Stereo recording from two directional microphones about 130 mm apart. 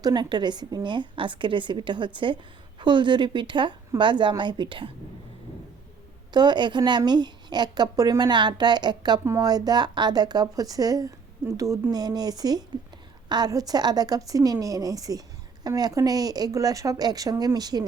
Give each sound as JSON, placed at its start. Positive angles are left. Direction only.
{"t": 0.0, "sound": "a woman's voice", "side_deg": -35}
{"t": 6.3, "sound": "a woman's voice", "side_deg": -35}